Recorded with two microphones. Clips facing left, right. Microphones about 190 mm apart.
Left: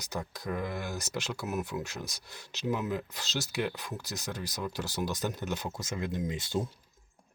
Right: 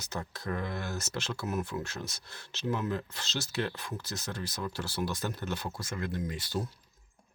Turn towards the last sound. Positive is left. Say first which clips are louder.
# left 2 dB
turn(degrees=20)  # may be behind; listen again after turning